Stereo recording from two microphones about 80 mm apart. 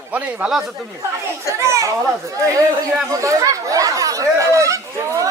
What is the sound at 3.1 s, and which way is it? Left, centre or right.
Speech, right.